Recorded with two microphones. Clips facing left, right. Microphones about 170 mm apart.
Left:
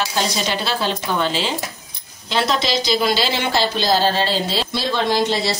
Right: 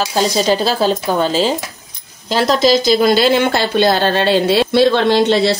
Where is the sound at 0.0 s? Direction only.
40° right (ahead or behind).